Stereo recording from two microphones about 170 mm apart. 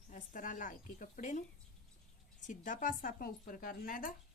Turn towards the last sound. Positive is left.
turn(degrees=55)  # may be behind; listen again after turning